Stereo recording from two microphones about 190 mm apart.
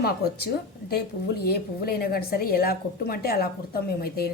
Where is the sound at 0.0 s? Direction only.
55° left (ahead or behind).